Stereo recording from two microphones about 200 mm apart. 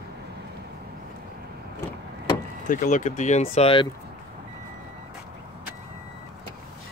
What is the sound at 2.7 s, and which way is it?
Speech, 40° left (ahead or behind).